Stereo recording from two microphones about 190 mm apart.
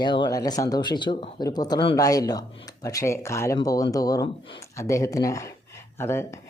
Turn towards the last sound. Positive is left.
turn(degrees=15)  # may be behind; listen again after turning